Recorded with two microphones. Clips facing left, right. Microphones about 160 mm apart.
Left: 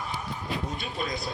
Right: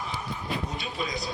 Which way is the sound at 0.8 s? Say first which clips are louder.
Even; 55° left (ahead or behind).